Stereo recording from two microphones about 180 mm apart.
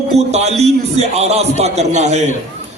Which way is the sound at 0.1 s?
35° right (ahead or behind).